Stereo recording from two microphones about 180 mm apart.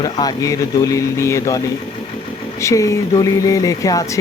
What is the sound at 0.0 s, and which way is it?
Speech, 20° left (ahead or behind).